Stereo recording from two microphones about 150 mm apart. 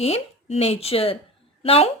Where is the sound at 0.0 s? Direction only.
45° left (ahead or behind).